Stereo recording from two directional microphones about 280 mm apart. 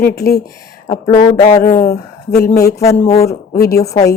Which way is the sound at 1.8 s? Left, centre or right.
Left.